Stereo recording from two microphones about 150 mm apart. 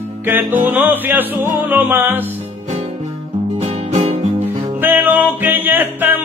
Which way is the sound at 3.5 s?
45° right (ahead or behind).